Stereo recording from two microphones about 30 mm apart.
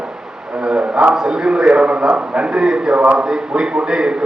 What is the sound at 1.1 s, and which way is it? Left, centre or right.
A man's voice, right.